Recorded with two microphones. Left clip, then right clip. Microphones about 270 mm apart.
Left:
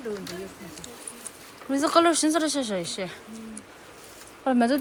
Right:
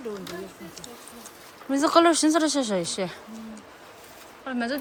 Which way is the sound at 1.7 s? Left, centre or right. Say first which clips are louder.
Right 2 dB; centre.